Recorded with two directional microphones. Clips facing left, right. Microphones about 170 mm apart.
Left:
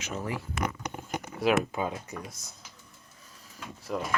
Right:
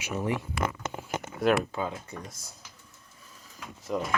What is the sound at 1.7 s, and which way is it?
Speech, 15° left (ahead or behind).